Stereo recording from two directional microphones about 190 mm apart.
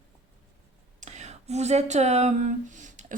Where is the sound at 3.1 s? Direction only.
45° right (ahead or behind).